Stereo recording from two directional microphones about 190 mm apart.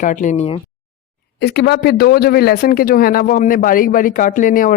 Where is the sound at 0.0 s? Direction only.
40° left (ahead or behind).